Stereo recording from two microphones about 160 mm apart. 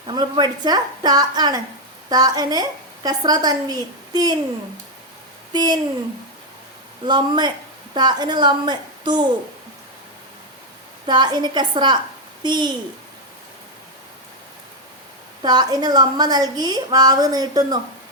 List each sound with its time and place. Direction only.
0.1 s a woman's voice: 25° right (ahead or behind)
5.5 s a woman's voice: 25° right (ahead or behind)
7.0 s a woman's voice: 30° right (ahead or behind)
11.0 s a woman's voice: 30° right (ahead or behind)
15.4 s a woman's voice: 25° right (ahead or behind)